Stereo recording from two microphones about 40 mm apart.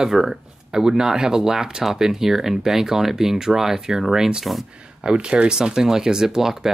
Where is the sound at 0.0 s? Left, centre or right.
Centre.